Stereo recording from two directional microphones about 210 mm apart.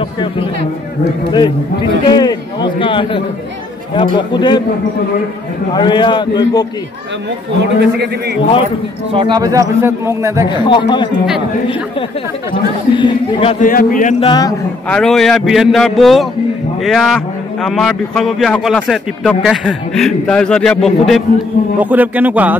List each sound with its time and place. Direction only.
1.3 s a man's voice: 20° left (ahead or behind)
5.8 s a man's voice: 20° left (ahead or behind)
7.6 s a man's voice: 55° right (ahead or behind)
9.1 s a man's voice: 20° right (ahead or behind)
10.5 s a man's voice: 20° left (ahead or behind)
12.9 s a man's voice: 25° left (ahead or behind)
13.7 s speech: 40° left (ahead or behind)
14.2 s a man's voice: 20° left (ahead or behind)
14.9 s a man's voice: 5° left (ahead or behind)